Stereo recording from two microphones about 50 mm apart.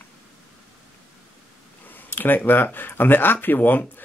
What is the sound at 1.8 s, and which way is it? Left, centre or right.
Speech, left.